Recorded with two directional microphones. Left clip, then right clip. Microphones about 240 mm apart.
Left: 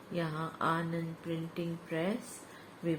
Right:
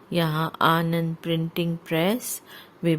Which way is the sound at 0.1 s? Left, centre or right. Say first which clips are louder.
Right 12 dB; right.